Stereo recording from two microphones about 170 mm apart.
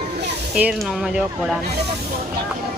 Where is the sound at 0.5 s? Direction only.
5° right (ahead or behind).